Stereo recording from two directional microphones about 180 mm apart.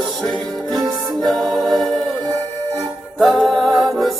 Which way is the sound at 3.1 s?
Centre (ahead or behind).